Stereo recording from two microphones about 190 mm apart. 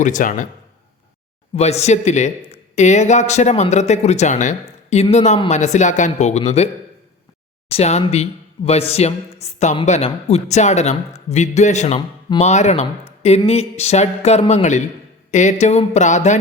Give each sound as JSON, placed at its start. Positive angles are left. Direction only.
{"t": 0.0, "sound": "a man's voice", "side_deg": 45}
{"t": 1.5, "sound": "speech", "side_deg": 35}
{"t": 7.7, "sound": "speech", "side_deg": 35}
{"t": 11.9, "sound": "speech", "side_deg": 25}
{"t": 12.5, "sound": "speech", "side_deg": 35}